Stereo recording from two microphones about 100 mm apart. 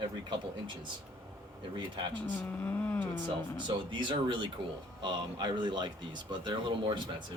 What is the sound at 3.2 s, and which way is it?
Speech, 50° right (ahead or behind).